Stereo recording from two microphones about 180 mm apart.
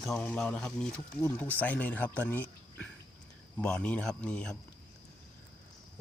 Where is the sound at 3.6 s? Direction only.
5° left (ahead or behind).